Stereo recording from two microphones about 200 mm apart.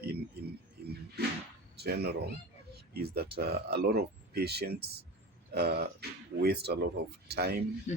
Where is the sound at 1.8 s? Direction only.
55° right (ahead or behind).